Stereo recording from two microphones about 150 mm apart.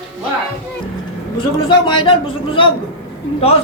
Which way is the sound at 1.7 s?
35° left (ahead or behind).